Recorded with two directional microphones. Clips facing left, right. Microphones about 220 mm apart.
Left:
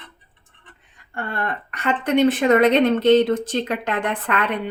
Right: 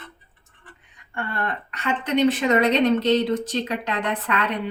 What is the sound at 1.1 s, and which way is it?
A woman's voice, 50° left (ahead or behind).